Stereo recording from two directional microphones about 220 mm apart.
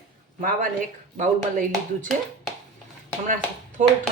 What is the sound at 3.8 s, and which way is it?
Speech, 35° right (ahead or behind).